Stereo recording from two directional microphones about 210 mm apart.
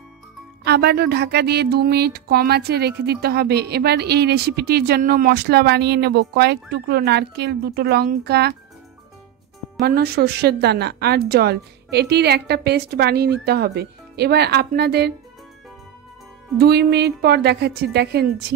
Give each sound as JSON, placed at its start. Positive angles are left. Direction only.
{"t": 0.7, "sound": "speech", "side_deg": -50}
{"t": 9.8, "sound": "speech", "side_deg": -45}
{"t": 16.5, "sound": "speech", "side_deg": -50}